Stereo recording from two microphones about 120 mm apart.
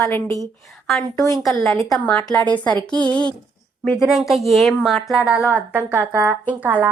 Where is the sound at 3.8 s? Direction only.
5° right (ahead or behind).